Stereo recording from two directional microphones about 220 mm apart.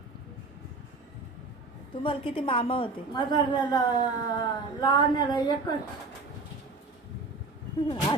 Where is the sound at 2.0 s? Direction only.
25° left (ahead or behind).